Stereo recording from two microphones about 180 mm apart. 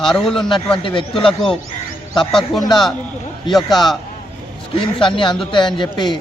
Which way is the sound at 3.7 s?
Centre (ahead or behind).